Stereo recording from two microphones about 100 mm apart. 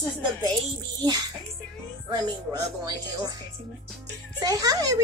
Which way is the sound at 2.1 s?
40° right (ahead or behind).